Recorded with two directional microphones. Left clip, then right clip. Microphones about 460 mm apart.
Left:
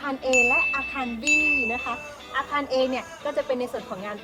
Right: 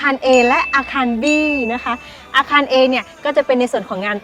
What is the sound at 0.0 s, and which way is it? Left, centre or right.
Speech, right.